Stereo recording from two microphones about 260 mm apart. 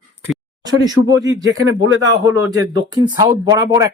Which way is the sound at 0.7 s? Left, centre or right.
Centre.